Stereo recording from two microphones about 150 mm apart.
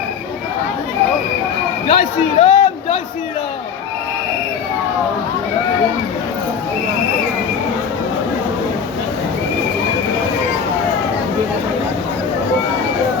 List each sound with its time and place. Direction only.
1.9 s speech: 40° left (ahead or behind)